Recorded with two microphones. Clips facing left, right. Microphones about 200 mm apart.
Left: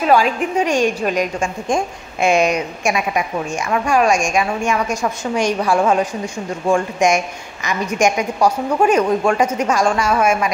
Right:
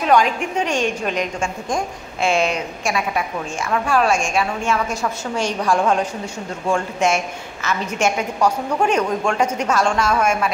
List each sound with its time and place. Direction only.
0.0 s a woman's voice: 5° left (ahead or behind)